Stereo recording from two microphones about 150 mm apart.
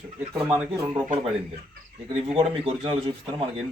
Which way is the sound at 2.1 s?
40° right (ahead or behind).